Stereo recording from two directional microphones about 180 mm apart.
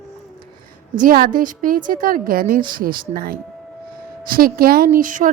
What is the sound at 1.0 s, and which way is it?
A woman's voice, 50° right (ahead or behind).